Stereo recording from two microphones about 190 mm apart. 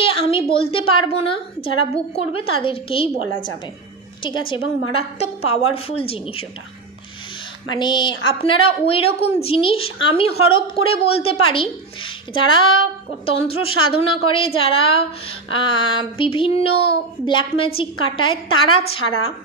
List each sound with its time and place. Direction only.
0.0 s a sound: 30° left (ahead or behind)
0.5 s a woman's voice: 30° left (ahead or behind)
4.9 s a woman's voice: 30° left (ahead or behind)
7.7 s a woman's voice: 25° left (ahead or behind)